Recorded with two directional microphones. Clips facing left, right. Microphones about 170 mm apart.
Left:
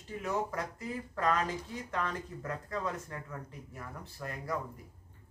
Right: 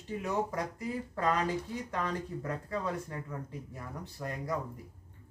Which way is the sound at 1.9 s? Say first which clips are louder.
Right 1 dB; 15° right (ahead or behind).